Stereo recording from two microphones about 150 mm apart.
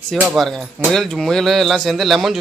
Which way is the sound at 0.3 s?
Centre (ahead or behind).